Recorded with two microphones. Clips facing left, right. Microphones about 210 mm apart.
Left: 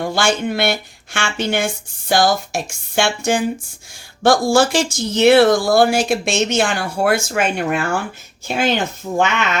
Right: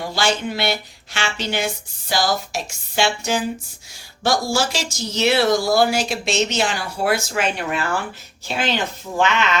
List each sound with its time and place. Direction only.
0.0 s a woman's voice: 50° left (ahead or behind)